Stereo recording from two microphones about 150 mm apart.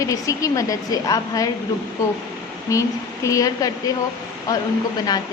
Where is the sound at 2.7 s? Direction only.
20° left (ahead or behind).